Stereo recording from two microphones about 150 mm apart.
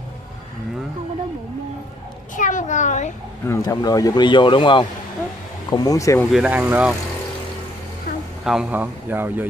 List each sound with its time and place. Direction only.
2.3 s a child's voice: 60° left (ahead or behind)
3.4 s speech: 25° left (ahead or behind)
6.3 s a man's voice: 5° right (ahead or behind)
8.5 s a man's voice: 5° right (ahead or behind)